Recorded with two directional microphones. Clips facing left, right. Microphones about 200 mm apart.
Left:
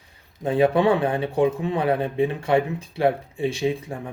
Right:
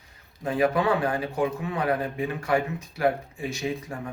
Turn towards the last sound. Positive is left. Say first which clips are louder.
# left 5 dB
turn(degrees=25)  # may be behind; listen again after turning